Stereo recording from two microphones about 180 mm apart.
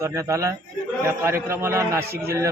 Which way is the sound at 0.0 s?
15° right (ahead or behind).